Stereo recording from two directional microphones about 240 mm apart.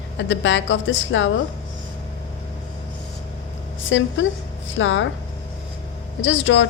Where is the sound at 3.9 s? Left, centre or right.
Left.